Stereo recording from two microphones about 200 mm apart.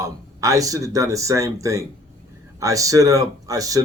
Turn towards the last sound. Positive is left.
turn(degrees=-15)  # may be behind; listen again after turning